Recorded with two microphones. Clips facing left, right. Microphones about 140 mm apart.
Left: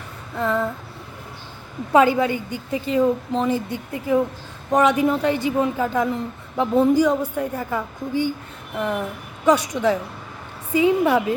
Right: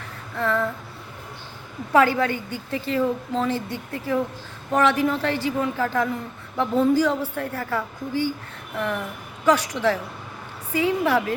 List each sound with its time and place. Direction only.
0.3 s a woman's voice: 20° left (ahead or behind)
1.9 s a woman's voice: 20° left (ahead or behind)